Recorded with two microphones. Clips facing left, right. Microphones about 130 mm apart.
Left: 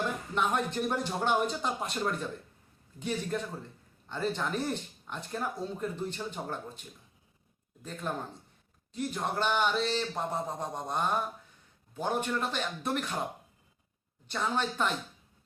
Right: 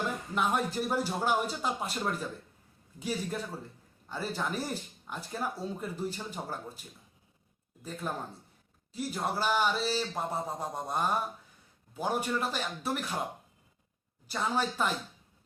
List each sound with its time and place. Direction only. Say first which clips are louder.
0.3 s speech: even; 5° right (ahead or behind)
3.0 s a man's voice: left 1 dB; 5° right (ahead or behind)
14.3 s speech: even; 10° right (ahead or behind)